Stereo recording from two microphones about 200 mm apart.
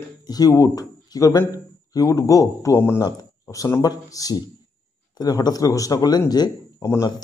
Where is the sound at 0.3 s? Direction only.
20° left (ahead or behind).